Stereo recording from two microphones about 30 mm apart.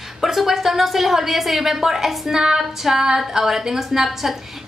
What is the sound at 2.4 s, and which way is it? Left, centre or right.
Female singing, right.